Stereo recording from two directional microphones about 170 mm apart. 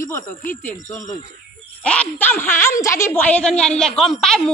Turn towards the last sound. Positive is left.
turn(degrees=0)  # may be behind; listen again after turning